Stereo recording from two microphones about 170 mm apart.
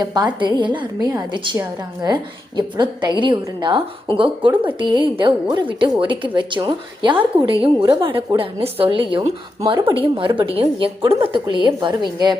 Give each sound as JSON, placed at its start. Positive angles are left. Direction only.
{"t": 0.0, "sound": "a woman's voice", "side_deg": -25}